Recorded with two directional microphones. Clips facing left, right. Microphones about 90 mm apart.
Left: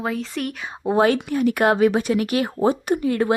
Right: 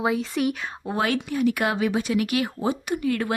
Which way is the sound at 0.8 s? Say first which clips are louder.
Left 8 dB; 30° left (ahead or behind).